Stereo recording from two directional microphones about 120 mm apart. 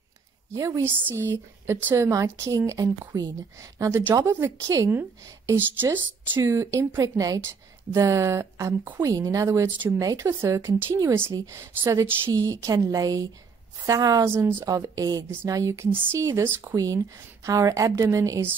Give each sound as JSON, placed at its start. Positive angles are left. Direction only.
{"t": 0.6, "sound": "speech", "side_deg": -25}